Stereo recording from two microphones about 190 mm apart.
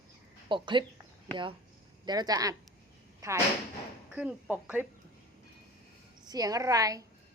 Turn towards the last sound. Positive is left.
turn(degrees=-20)  # may be behind; listen again after turning